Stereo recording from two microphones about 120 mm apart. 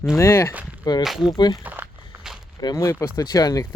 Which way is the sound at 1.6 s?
15° right (ahead or behind).